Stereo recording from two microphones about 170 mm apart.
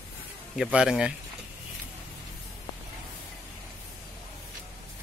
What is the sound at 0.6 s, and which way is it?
Speech, 5° right (ahead or behind).